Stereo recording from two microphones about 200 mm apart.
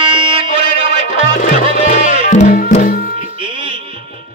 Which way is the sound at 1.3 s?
40° left (ahead or behind).